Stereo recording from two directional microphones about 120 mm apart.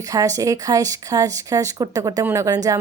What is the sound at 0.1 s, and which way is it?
A woman's voice, 30° right (ahead or behind).